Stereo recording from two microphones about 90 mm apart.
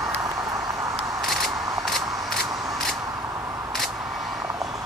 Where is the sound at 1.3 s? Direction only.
Centre (ahead or behind).